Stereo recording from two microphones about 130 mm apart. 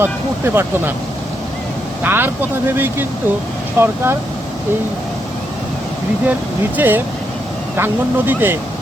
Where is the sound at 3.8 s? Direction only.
20° right (ahead or behind).